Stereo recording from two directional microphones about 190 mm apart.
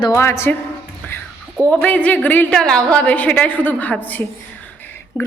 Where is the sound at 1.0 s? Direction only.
10° left (ahead or behind).